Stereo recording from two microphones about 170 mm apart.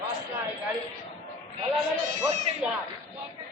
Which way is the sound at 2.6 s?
5° right (ahead or behind).